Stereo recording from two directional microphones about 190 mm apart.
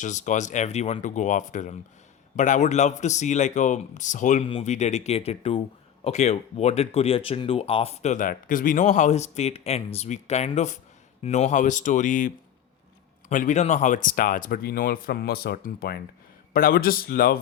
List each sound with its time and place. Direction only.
0.0 s speech: 40° left (ahead or behind)